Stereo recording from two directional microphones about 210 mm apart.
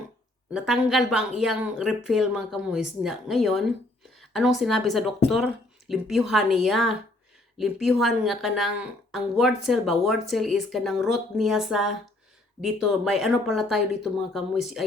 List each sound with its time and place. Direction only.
0.5 s speech: 5° right (ahead or behind)